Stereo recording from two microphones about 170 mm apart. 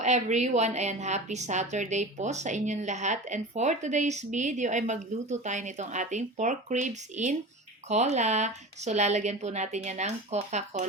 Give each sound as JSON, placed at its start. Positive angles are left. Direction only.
{"t": 0.0, "sound": "a woman's voice", "side_deg": -45}